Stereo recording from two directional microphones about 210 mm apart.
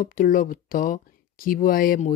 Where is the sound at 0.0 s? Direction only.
40° left (ahead or behind).